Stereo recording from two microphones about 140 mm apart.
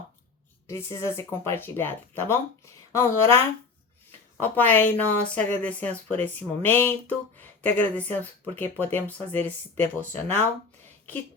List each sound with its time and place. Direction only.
0.7 s speech: 20° left (ahead or behind)